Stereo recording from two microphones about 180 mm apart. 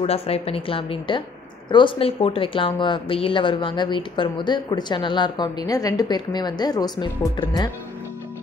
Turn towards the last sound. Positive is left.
turn(degrees=25)  # may be behind; listen again after turning